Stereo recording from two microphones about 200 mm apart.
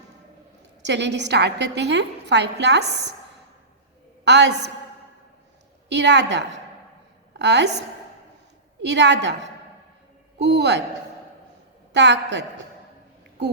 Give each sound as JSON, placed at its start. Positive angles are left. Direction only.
{"t": 0.9, "sound": "a woman's voice", "side_deg": -60}
{"t": 4.3, "sound": "a woman's voice", "side_deg": -60}
{"t": 5.9, "sound": "a woman's voice", "side_deg": -60}
{"t": 8.8, "sound": "a woman's voice", "side_deg": -60}
{"t": 11.9, "sound": "a woman's voice", "side_deg": -60}